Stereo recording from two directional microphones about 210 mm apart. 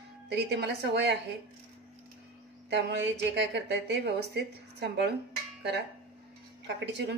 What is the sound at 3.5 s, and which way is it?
A woman's voice, 55° right (ahead or behind).